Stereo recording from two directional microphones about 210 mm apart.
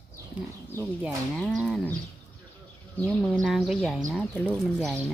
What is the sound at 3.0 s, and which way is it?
Speech, 5° left (ahead or behind).